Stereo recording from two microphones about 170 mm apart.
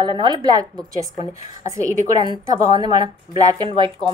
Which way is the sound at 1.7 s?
20° right (ahead or behind).